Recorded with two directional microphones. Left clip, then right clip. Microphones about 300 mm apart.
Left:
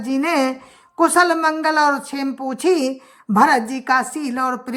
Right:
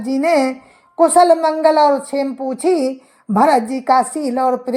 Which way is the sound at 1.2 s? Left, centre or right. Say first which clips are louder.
Right 5 dB; centre.